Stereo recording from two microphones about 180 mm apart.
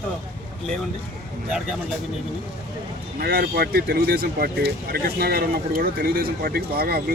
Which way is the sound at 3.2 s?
60° right (ahead or behind).